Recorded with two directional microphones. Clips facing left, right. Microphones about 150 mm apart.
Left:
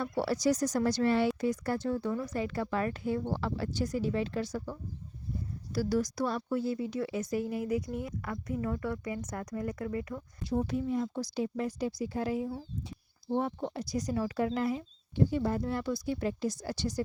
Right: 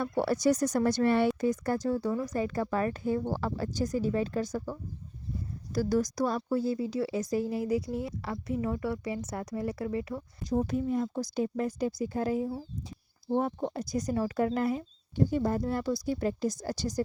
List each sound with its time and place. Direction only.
0.2 s speech: 55° right (ahead or behind); by 10.2 s 25° right (ahead or behind)
10.4 s speech: 40° right (ahead or behind)